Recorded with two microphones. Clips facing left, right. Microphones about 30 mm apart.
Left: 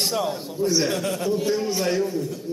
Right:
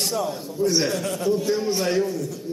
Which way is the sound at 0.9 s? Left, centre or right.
Centre.